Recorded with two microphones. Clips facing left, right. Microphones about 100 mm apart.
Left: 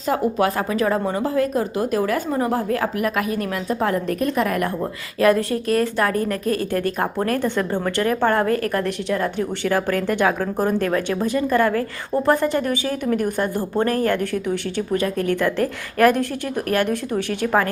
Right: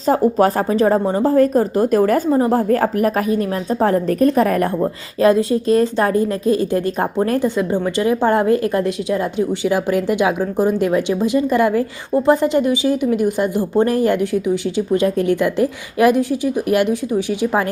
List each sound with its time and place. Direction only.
0.1 s speech: 35° right (ahead or behind)
2.3 s speech: 30° right (ahead or behind)
2.6 s speech: 40° right (ahead or behind)
5.2 s a woman's voice: 20° right (ahead or behind)
16.8 s speech: 55° left (ahead or behind)
17.4 s a woman's voice: 15° right (ahead or behind)